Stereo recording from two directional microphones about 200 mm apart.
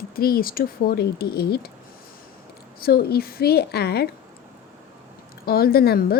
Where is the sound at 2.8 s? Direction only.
50° left (ahead or behind).